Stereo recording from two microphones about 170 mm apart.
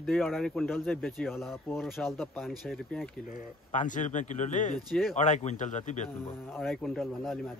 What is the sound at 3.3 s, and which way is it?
Speech, 50° left (ahead or behind).